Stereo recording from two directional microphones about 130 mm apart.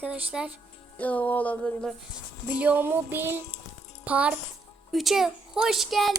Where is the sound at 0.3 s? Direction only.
10° right (ahead or behind).